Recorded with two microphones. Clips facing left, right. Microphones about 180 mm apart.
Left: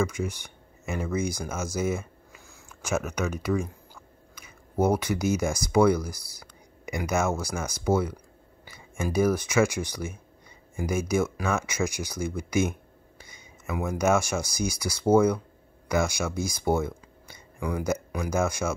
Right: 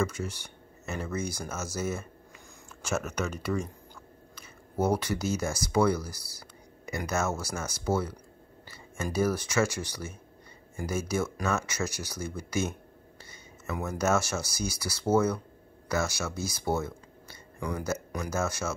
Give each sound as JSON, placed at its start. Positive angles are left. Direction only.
{"t": 0.0, "sound": "speech", "side_deg": 10}